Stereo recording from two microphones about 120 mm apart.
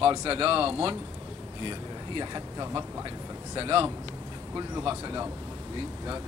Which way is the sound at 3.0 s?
45° right (ahead or behind).